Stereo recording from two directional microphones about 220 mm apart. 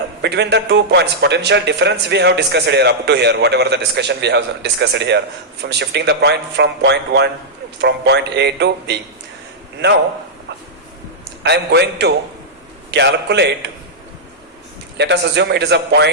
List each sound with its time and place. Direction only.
0.2 s a man's voice: 50° right (ahead or behind)
11.4 s a man's voice: 50° right (ahead or behind)
14.9 s a man's voice: 50° right (ahead or behind)